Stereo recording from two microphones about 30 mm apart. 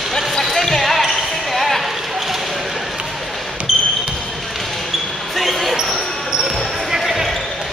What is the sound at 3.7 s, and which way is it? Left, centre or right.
Basketball bounce, centre.